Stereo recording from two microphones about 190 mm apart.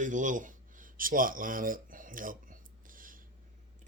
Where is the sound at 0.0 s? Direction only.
40° right (ahead or behind).